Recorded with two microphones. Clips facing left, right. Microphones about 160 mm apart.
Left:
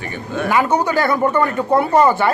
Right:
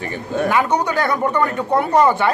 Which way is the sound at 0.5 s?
5° left (ahead or behind).